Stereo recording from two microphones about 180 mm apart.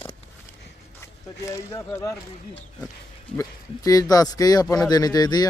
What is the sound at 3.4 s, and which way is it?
Speech, 20° left (ahead or behind).